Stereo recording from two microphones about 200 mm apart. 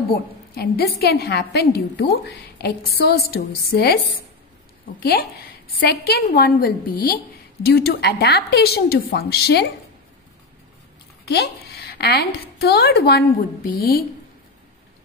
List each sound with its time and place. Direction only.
0.1 s a woman's voice: 50° left (ahead or behind)
5.8 s a woman's voice: 50° left (ahead or behind)
11.2 s a woman's voice: 55° left (ahead or behind)